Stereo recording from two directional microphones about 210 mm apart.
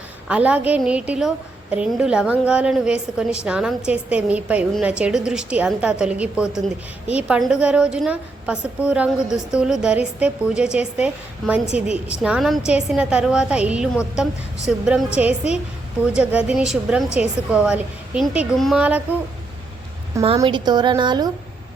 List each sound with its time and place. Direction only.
0.3 s a woman's voice: 5° right (ahead or behind)
20.2 s speech: 25° right (ahead or behind)